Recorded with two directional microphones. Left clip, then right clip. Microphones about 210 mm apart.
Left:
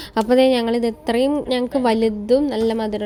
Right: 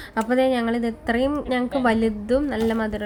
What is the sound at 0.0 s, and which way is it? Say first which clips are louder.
A woman's voice: left 5 dB; 35° left (ahead or behind).